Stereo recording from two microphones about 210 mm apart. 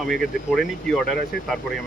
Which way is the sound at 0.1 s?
Centre (ahead or behind).